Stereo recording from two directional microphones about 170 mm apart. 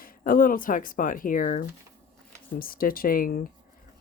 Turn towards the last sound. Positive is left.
turn(degrees=60)  # may be behind; listen again after turning